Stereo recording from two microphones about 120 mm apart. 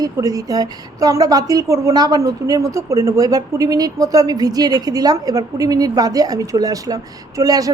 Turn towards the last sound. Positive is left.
turn(degrees=-30)  # may be behind; listen again after turning